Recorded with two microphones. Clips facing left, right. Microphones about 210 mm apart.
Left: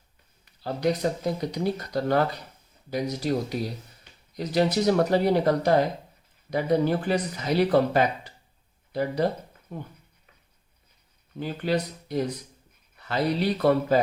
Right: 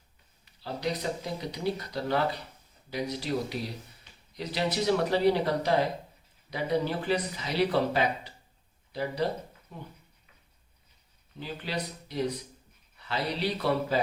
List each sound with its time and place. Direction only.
0.6 s speech: 50° left (ahead or behind)
11.3 s speech: 50° left (ahead or behind)